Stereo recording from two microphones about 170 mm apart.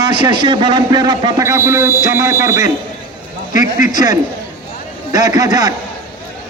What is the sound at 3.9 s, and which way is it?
A man's voice, 20° right (ahead or behind).